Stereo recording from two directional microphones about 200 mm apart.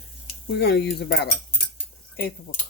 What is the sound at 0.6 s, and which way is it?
Cutlery, 55° left (ahead or behind).